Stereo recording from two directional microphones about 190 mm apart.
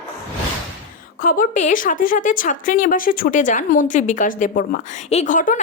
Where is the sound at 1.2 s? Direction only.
45° left (ahead or behind).